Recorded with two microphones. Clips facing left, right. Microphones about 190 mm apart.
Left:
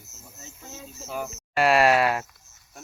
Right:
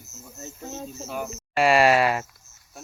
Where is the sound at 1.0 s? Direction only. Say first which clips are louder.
Left 2 dB; centre (ahead or behind).